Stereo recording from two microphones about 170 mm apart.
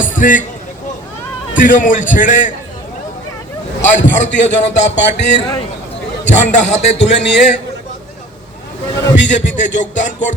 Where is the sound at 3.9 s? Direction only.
90° left.